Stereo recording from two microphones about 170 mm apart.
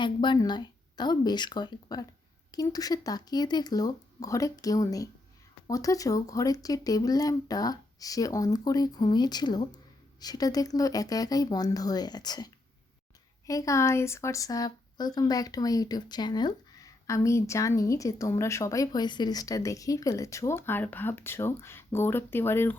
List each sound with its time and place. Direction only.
0.0 s speech: 25° left (ahead or behind)
13.5 s speech: 20° left (ahead or behind)